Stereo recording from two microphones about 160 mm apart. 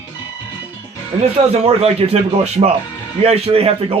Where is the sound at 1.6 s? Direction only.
40° right (ahead or behind).